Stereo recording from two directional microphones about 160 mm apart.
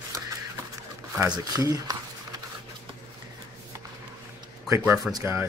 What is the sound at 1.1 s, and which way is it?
Speech, 20° right (ahead or behind).